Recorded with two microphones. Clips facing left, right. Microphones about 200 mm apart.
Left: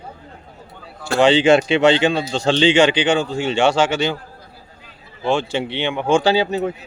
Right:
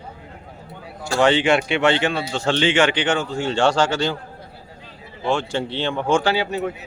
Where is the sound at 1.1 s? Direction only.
15° left (ahead or behind).